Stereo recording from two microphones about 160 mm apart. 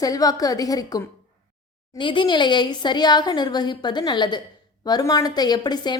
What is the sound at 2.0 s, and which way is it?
A woman's voice, 30° left (ahead or behind).